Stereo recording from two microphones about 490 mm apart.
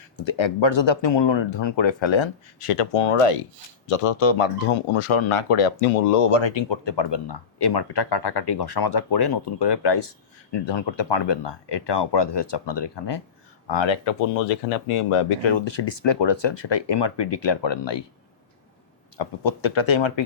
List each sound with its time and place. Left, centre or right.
0.2 s speech: left
6.3 s speech: left
19.1 s speech: left